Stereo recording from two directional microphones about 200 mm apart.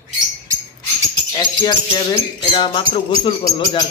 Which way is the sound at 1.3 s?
25° left (ahead or behind).